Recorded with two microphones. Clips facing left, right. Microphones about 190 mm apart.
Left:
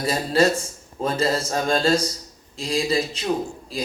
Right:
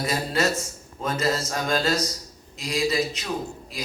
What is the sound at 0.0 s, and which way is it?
A man's voice, 30° left (ahead or behind).